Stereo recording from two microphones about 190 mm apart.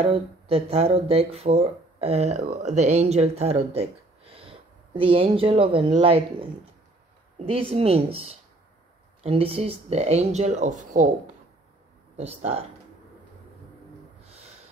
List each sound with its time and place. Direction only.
0.0 s speech: 30° right (ahead or behind)
4.3 s a sound: 30° right (ahead or behind)
5.8 s speech: 25° right (ahead or behind)
12.2 s speech: 35° right (ahead or behind)